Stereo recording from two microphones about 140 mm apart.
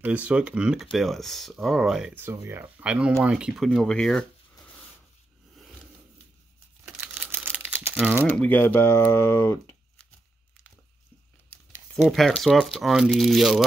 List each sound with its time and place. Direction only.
0.0 s speech: 10° right (ahead or behind)
2.1 s speech: 15° right (ahead or behind); by 4.3 s 5° left (ahead or behind)
6.8 s crumpling: 10° right (ahead or behind)
8.3 s speech: 10° left (ahead or behind)
11.9 s speech: centre (ahead or behind)